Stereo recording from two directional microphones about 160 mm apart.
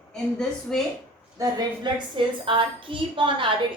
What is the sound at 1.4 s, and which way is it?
A woman's voice, 30° right (ahead or behind).